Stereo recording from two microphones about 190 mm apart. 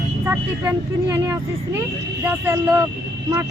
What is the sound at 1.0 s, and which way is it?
Speech, 20° right (ahead or behind).